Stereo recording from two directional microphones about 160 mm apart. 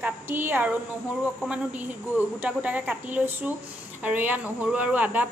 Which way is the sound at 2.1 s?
10° right (ahead or behind).